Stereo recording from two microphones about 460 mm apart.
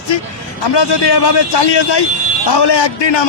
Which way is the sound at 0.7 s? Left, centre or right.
Left.